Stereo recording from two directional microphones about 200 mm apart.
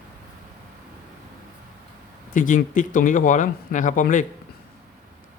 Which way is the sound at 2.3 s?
40° left (ahead or behind).